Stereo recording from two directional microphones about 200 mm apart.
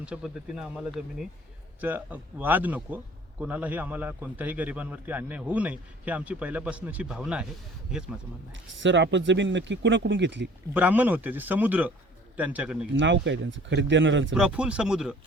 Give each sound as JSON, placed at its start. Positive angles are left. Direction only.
{"t": 0.0, "sound": "a man's voice", "side_deg": -5}
{"t": 8.5, "sound": "speech", "side_deg": -65}
{"t": 10.8, "sound": "a man's voice", "side_deg": -10}
{"t": 13.0, "sound": "speech", "side_deg": -65}
{"t": 14.3, "sound": "speech", "side_deg": -5}